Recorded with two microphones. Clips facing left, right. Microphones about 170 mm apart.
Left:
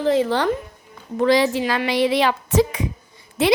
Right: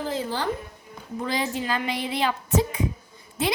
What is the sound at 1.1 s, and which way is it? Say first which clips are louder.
A woman's voice: left 10 dB; 90° left.